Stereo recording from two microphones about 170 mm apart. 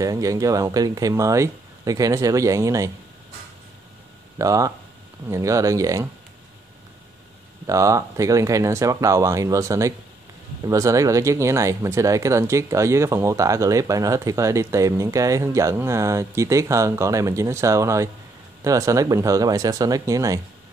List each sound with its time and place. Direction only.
0.0 s speech: 20° right (ahead or behind)
4.4 s speech: 20° right (ahead or behind)
7.6 s speech: 20° right (ahead or behind)